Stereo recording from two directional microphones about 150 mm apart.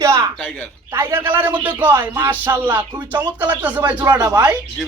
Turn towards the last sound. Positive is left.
turn(degrees=-25)  # may be behind; listen again after turning